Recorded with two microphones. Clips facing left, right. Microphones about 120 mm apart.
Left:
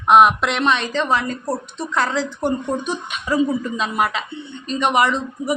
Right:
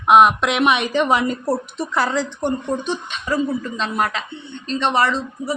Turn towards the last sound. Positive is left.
turn(degrees=15)  # may be behind; listen again after turning